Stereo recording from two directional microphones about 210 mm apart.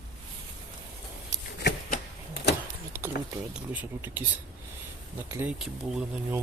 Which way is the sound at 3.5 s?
10° right (ahead or behind).